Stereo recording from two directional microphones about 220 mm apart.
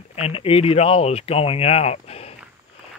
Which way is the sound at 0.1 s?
25° left (ahead or behind).